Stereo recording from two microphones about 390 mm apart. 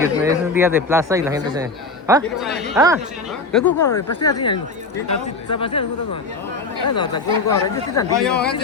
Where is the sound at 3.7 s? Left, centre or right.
Left.